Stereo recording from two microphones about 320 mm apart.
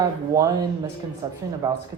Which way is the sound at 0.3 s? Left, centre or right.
Centre.